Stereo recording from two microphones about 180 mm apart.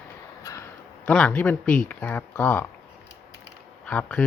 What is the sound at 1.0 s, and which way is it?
Speech, 5° left (ahead or behind).